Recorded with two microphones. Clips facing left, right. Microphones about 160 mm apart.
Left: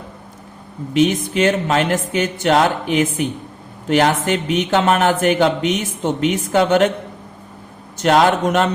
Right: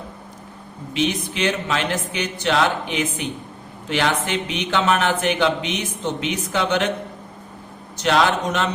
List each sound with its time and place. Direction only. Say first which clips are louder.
0.9 s speech: left 7 dB; 45° left (ahead or behind)
7.9 s speech: left 5 dB; 50° left (ahead or behind)